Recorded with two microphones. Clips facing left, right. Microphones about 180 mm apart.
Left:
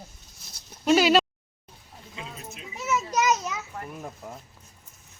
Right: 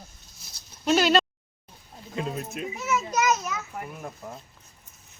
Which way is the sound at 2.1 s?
55° right (ahead or behind).